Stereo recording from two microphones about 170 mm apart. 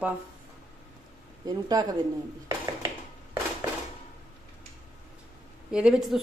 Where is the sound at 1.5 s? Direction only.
20° right (ahead or behind).